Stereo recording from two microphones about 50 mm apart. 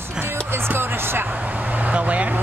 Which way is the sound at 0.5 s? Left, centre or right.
Right.